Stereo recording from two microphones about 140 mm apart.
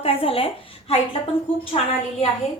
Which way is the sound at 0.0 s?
45° left (ahead or behind).